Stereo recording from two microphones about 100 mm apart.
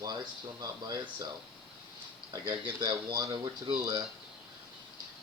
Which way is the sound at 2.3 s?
40° right (ahead or behind).